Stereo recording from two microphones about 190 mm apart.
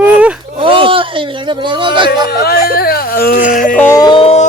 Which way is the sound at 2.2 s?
55° left (ahead or behind).